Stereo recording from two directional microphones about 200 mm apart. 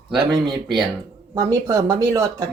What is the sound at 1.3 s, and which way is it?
A woman's voice, 15° right (ahead or behind).